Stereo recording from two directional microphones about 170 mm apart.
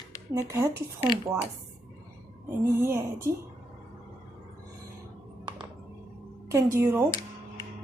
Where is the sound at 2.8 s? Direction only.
15° right (ahead or behind).